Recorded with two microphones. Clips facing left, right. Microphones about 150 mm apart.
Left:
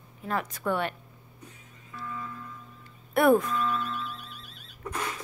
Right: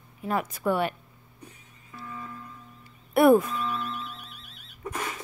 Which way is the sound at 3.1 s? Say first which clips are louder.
Right 3 dB; 10° right (ahead or behind).